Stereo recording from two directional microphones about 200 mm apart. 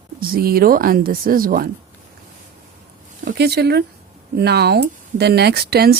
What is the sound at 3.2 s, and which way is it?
Speech, 55° right (ahead or behind).